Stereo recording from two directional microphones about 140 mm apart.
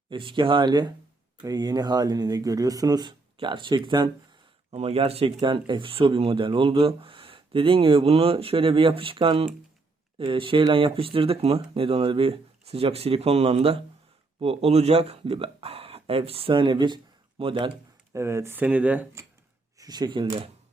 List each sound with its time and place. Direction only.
0.1 s speech: 35° right (ahead or behind)
4.7 s speech: 45° right (ahead or behind)
18.1 s speech: 20° right (ahead or behind)
19.8 s speech: 30° right (ahead or behind)